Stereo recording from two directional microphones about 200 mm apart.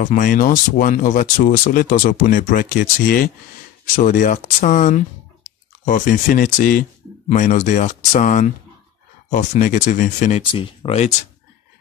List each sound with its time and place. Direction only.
0.0 s speech: 40° left (ahead or behind)
10.4 s speech: 25° left (ahead or behind)